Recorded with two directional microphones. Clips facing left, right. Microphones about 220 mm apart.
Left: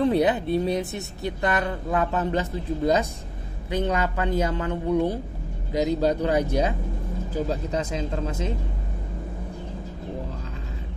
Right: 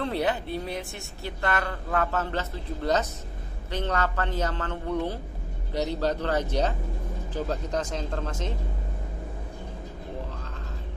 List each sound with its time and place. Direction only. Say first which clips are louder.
0.0 s speech: left 7 dB; 15° left (ahead or behind)